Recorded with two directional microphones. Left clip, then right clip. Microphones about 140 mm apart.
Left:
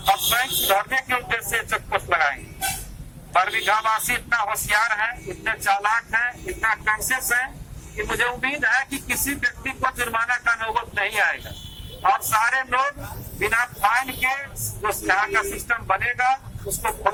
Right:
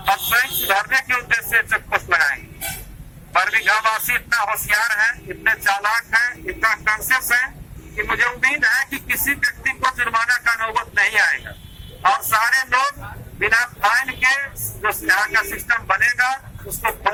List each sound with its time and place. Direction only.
0.3 s a man's voice: 20° left (ahead or behind)